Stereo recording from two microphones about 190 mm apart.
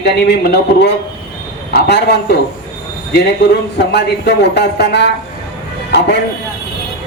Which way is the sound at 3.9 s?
65° left (ahead or behind).